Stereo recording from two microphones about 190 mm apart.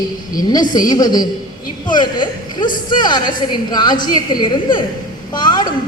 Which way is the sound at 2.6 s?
45° left (ahead or behind).